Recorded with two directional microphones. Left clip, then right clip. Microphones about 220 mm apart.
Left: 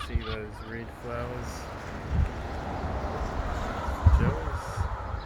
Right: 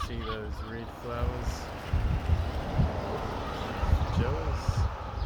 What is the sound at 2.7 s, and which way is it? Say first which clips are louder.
Vehicle: right 1 dB; 45° right (ahead or behind).